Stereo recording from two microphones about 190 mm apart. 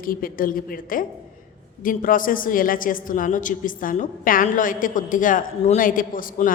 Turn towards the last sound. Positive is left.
turn(degrees=45)  # may be behind; listen again after turning